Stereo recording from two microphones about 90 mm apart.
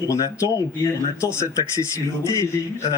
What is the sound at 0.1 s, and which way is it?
A man's voice, 35° left (ahead or behind).